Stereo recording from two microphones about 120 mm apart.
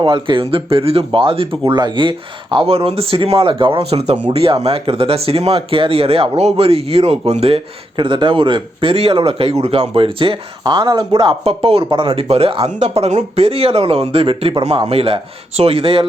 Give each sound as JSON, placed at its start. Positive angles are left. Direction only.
{"t": 0.0, "sound": "speech", "side_deg": -45}